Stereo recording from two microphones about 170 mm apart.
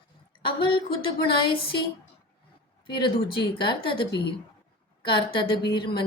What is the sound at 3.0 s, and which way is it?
A woman's voice, 30° left (ahead or behind).